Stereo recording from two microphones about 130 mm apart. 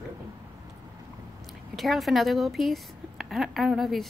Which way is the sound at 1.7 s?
Centre (ahead or behind).